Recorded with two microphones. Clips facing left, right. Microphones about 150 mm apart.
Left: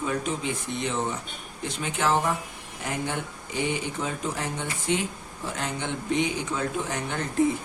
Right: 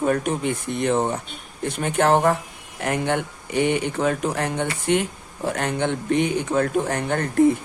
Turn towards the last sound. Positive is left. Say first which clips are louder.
# right 7 dB
turn(degrees=-55)  # may be behind; listen again after turning